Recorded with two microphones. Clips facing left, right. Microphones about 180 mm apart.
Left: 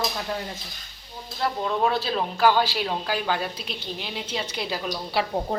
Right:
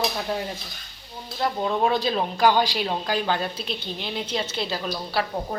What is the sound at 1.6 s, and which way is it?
Speech, 15° right (ahead or behind).